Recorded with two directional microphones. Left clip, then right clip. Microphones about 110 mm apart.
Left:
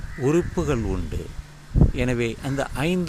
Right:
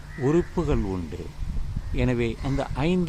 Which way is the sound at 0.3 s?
15° left (ahead or behind).